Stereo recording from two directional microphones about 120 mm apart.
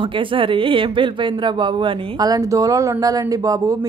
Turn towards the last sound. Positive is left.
turn(degrees=-30)  # may be behind; listen again after turning